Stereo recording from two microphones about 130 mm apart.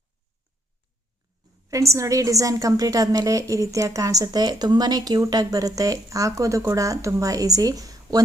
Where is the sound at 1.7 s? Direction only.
25° right (ahead or behind).